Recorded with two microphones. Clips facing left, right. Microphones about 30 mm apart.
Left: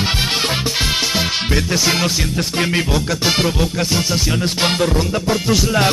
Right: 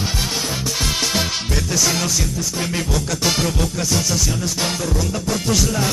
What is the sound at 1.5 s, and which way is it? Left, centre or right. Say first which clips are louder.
Music: left 3 dB; left.